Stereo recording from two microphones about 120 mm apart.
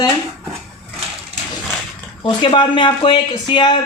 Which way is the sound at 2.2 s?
45° left (ahead or behind).